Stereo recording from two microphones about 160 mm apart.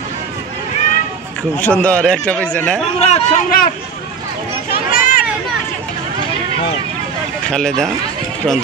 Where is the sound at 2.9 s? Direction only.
45° left (ahead or behind).